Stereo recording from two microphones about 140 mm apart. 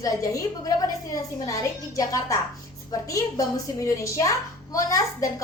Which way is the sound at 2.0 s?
25° left (ahead or behind).